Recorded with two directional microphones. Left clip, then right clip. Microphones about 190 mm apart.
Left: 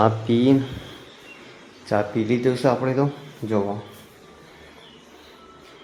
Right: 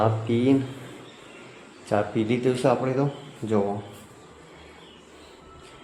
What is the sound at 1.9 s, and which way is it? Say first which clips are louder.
Speech: left 2 dB; 15° left (ahead or behind).